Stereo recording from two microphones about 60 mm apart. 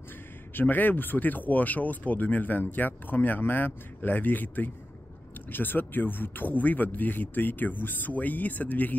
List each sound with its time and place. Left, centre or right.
0.6 s speech: left